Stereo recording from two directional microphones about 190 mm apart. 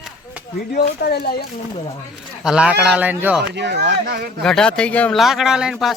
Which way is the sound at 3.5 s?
65° right (ahead or behind).